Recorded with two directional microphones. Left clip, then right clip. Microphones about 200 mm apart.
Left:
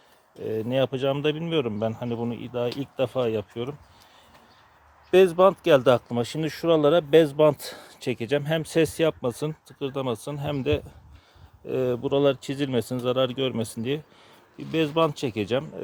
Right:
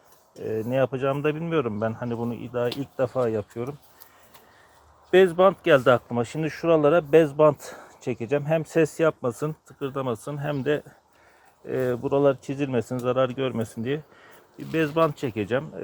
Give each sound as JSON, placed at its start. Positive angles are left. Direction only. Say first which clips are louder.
{"t": 0.3, "sound": "speech", "louder": "even", "side_deg": 15}
{"t": 3.0, "sound": "speech", "louder": "right 1 dB", "side_deg": 5}
{"t": 5.1, "sound": "speech", "louder": "even", "side_deg": 10}